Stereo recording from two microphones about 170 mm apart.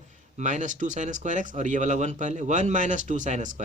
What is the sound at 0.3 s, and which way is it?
Speech, 45° right (ahead or behind).